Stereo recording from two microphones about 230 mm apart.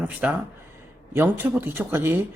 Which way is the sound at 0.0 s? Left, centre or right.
Centre.